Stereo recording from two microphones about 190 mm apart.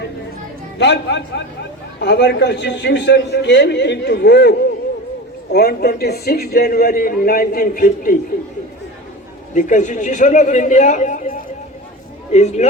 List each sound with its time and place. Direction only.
0.8 s a man's voice: 65° left (ahead or behind); by 8.1 s 50° left (ahead or behind)
9.6 s a man's voice: 40° left (ahead or behind)